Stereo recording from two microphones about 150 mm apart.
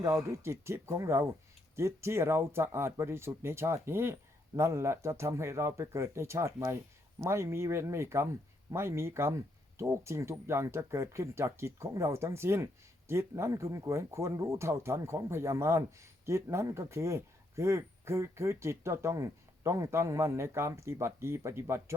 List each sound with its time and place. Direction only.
0.0 s speech: 20° right (ahead or behind)